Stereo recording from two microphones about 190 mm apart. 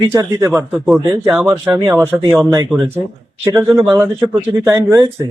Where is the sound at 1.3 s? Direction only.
5° right (ahead or behind).